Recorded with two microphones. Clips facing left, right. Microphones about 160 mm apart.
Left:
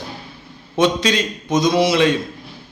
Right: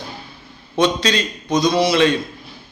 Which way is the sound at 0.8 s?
10° left (ahead or behind).